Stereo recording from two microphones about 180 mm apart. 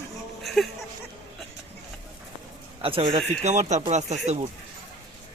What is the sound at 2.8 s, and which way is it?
A man's voice, 30° right (ahead or behind).